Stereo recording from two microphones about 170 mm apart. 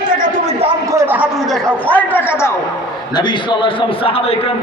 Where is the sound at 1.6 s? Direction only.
10° left (ahead or behind).